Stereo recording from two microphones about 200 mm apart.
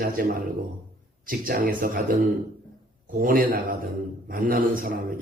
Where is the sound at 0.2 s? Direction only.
45° right (ahead or behind).